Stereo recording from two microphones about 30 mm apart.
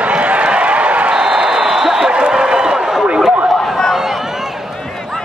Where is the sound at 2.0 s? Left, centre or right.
Right.